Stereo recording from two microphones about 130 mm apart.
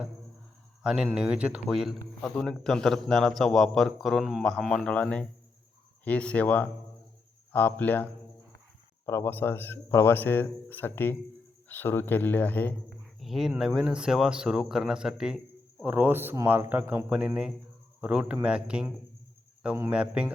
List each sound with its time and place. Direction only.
0.8 s a man's voice: 5° right (ahead or behind); by 8.0 s 15° left (ahead or behind)
9.0 s speech: 20° left (ahead or behind)
13.1 s a sound: centre (ahead or behind)
13.6 s a man's voice: 5° right (ahead or behind)